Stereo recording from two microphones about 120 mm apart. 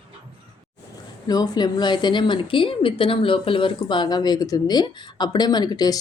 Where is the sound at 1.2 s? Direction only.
35° left (ahead or behind).